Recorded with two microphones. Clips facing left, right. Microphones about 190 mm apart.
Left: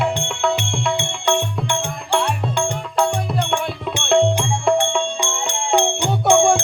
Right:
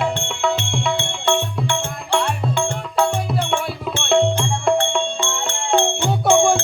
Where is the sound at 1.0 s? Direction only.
15° left (ahead or behind).